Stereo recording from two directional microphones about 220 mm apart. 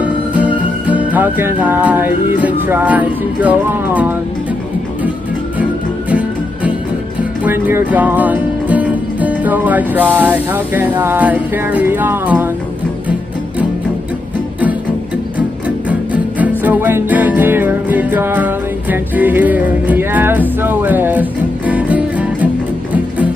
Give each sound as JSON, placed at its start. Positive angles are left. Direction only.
{"t": 0.0, "sound": "music", "side_deg": -5}
{"t": 5.6, "sound": "music", "side_deg": -5}
{"t": 15.9, "sound": "music", "side_deg": -5}